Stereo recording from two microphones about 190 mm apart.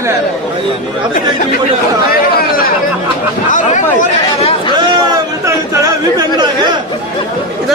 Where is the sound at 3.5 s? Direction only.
40° left (ahead or behind).